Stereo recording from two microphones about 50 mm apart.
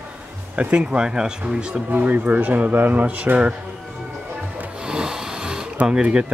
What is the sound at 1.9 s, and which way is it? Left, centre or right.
Speech, right.